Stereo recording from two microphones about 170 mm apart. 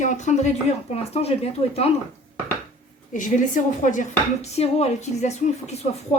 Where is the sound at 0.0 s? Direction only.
45° left (ahead or behind).